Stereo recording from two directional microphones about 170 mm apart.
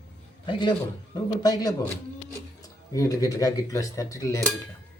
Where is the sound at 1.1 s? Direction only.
25° left (ahead or behind).